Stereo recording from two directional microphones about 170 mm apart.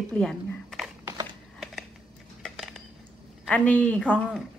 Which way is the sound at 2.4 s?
Centre (ahead or behind).